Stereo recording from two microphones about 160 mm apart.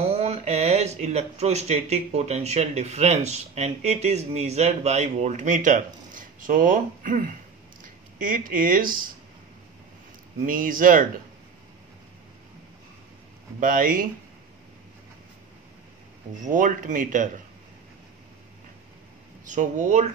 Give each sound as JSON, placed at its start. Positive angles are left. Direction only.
{"t": 0.0, "sound": "speech", "side_deg": -40}
{"t": 10.4, "sound": "speech", "side_deg": -60}
{"t": 13.6, "sound": "speech", "side_deg": -55}
{"t": 16.4, "sound": "speech", "side_deg": -55}
{"t": 19.4, "sound": "speech", "side_deg": -50}